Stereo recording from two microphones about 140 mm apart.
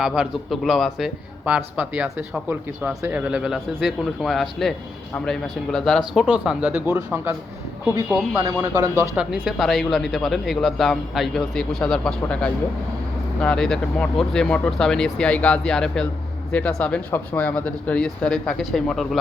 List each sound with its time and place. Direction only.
0.0 s a man's voice: centre (ahead or behind)
8.4 s speech: 25° right (ahead or behind)
9.1 s a man's voice: 5° right (ahead or behind)